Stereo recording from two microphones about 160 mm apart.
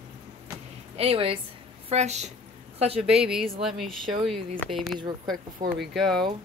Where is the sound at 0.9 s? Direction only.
35° right (ahead or behind).